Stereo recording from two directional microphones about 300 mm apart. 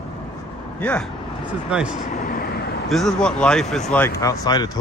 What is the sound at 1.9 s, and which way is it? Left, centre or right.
Vehicle, left.